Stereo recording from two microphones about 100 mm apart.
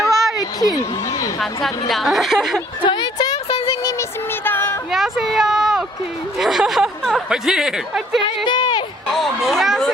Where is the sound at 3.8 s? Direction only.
35° left (ahead or behind).